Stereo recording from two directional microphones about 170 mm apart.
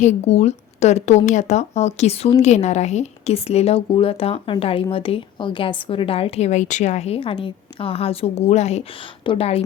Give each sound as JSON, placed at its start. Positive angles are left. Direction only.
{"t": 0.0, "sound": "a woman's voice", "side_deg": 40}